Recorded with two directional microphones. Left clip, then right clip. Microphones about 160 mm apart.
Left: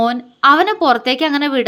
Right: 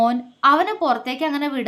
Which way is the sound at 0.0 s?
25° left (ahead or behind).